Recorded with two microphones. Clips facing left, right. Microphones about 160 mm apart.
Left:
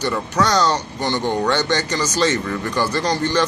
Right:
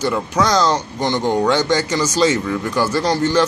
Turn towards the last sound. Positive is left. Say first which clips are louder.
# right 3 dB
turn(degrees=-10)  # may be behind; listen again after turning